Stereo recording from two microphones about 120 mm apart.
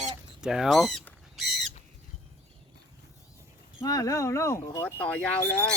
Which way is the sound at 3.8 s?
30° left (ahead or behind).